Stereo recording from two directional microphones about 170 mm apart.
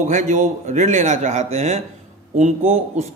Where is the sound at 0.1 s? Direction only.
45° right (ahead or behind).